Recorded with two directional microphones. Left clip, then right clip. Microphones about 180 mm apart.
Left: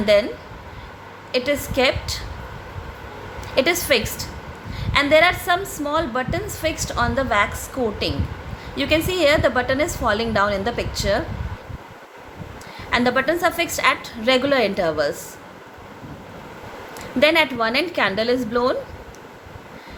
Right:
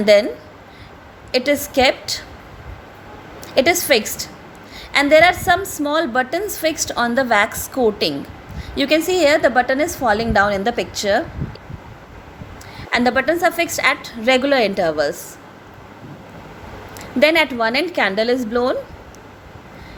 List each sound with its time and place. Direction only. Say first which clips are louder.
0.0 s a woman's voice: right 4 dB; 30° right (ahead or behind)
1.3 s a woman's voice: right 4 dB; 30° right (ahead or behind)
3.5 s a woman's voice: right 4 dB; 25° right (ahead or behind)
12.9 s a woman's voice: right 2 dB; 25° right (ahead or behind)
17.0 s a woman's voice: right 2 dB; 25° right (ahead or behind)